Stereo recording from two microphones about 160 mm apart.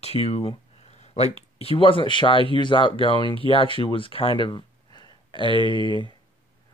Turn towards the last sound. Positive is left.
turn(degrees=30)  # may be behind; listen again after turning